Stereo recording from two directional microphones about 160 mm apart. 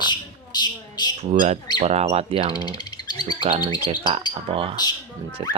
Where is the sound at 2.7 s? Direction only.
25° left (ahead or behind).